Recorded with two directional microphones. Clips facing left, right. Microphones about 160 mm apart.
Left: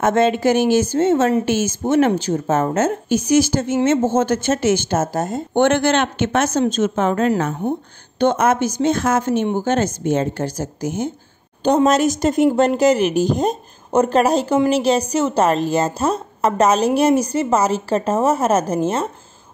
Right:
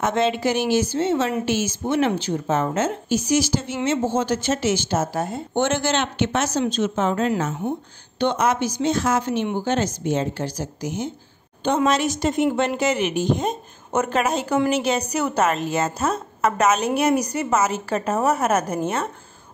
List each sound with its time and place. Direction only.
0.0 s a woman's voice: 50° left (ahead or behind)
5.6 s a woman's voice: 60° left (ahead or behind); by 19.0 s 30° left (ahead or behind)